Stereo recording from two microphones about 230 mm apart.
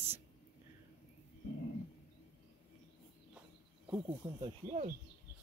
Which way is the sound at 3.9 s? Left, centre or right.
Centre.